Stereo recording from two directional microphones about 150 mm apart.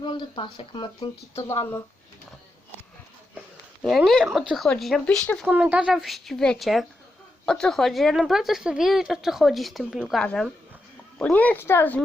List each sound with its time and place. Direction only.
0.0 s speech: 30° left (ahead or behind)
1.5 s speech: 15° left (ahead or behind)
3.8 s a woman's voice: centre (ahead or behind)
5.5 s a woman's voice: 10° right (ahead or behind); by 12.0 s 10° left (ahead or behind)